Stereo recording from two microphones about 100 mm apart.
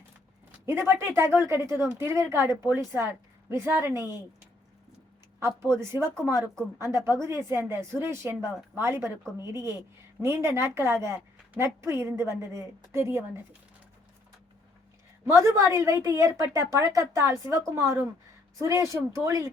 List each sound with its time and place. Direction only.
0.6 s speech: 25° right (ahead or behind)
5.4 s speech: 25° right (ahead or behind)
15.2 s a woman's voice: 30° right (ahead or behind)